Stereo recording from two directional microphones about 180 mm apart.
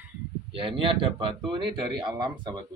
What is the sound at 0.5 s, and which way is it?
A man's voice, 30° right (ahead or behind).